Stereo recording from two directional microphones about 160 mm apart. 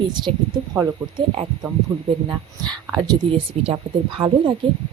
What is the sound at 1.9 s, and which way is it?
Speech, 30° right (ahead or behind).